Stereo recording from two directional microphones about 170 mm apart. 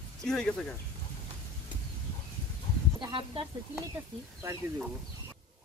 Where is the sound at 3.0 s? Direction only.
30° right (ahead or behind).